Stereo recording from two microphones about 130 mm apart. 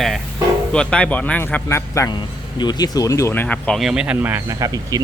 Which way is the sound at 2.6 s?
35° left (ahead or behind).